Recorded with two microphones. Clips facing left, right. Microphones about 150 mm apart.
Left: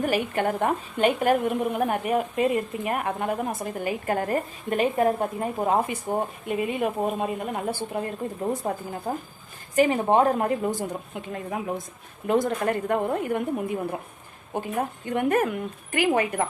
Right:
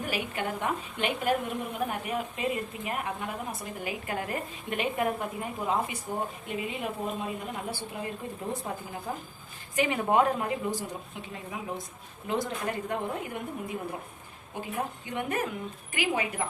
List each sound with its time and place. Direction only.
0.0 s a woman's voice: 50° left (ahead or behind)
10.1 s speech: 30° left (ahead or behind)
10.3 s a woman's voice: 50° left (ahead or behind)
15.0 s a woman's voice: 50° left (ahead or behind)